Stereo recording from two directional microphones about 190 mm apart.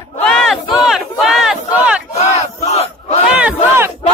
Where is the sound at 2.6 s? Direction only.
35° left (ahead or behind).